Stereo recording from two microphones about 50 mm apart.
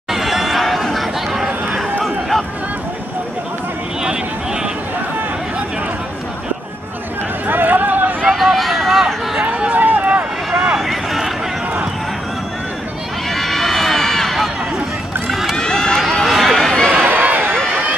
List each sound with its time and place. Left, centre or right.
0.1 s chatter: centre
2.0 s a sound: centre
7.4 s a sound: right
8.4 s run: centre
9.5 s run: right
10.0 s vehicle: right
10.8 s vehicle: centre
13.3 s run: centre
15.5 s run: centre
16.3 s run: centre
16.9 s run: right